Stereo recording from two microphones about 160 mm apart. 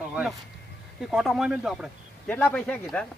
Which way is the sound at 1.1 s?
Centre (ahead or behind).